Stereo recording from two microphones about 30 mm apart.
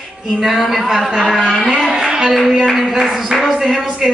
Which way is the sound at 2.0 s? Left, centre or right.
Right.